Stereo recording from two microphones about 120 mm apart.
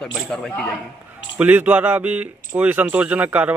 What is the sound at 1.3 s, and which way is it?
Speech, 15° right (ahead or behind).